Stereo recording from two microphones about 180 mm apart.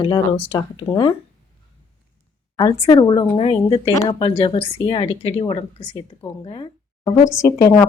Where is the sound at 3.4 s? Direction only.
35° left (ahead or behind).